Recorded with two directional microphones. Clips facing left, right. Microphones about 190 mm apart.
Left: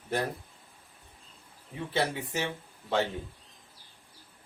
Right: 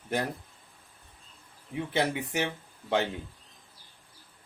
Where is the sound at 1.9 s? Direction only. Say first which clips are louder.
Right 1 dB; 20° right (ahead or behind).